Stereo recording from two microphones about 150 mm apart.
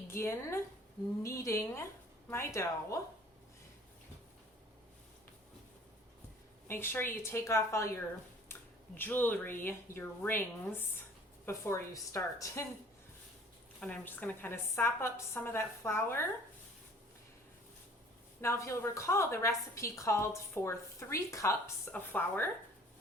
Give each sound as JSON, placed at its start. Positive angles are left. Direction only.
{"t": 0.1, "sound": "a woman's voice", "side_deg": 15}
{"t": 6.7, "sound": "a woman's voice", "side_deg": 15}
{"t": 9.0, "sound": "a woman's voice", "side_deg": 15}
{"t": 13.7, "sound": "a woman's voice", "side_deg": 10}
{"t": 18.4, "sound": "a woman's voice", "side_deg": 20}